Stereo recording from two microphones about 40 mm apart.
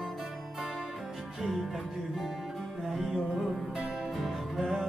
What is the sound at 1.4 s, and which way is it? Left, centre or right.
Music, centre.